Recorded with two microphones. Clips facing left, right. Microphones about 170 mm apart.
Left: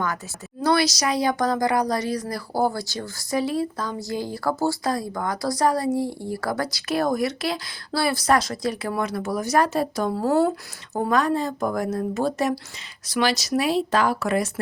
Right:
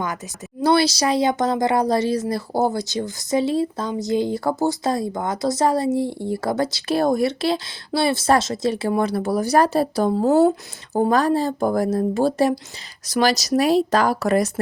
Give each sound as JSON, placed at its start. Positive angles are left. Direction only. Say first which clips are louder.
{"t": 0.6, "sound": "speech", "louder": "right 3 dB", "side_deg": -30}
{"t": 10.2, "sound": "speech", "louder": "right 4 dB", "side_deg": -20}
{"t": 10.9, "sound": "speech", "louder": "right 4 dB", "side_deg": -35}